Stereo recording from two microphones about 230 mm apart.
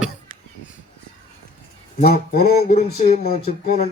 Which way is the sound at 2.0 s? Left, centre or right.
Left.